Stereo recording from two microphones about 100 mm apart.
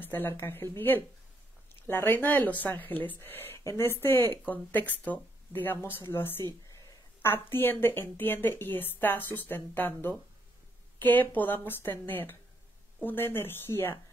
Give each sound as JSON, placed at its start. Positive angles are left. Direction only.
{"t": 0.0, "sound": "speech", "side_deg": 20}